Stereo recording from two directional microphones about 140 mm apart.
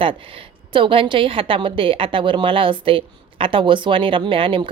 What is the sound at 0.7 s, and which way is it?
A woman's voice, 40° right (ahead or behind).